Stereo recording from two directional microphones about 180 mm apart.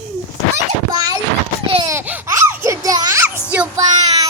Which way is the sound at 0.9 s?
20° right (ahead or behind).